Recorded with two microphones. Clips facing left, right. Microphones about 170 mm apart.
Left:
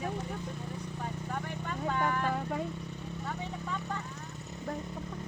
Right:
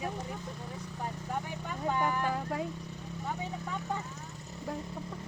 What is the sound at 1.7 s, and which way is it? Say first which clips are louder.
Speech: right 1 dB; 10° right (ahead or behind).